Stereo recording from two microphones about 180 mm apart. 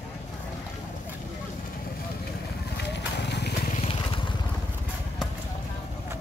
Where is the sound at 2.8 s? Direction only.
70° left (ahead or behind).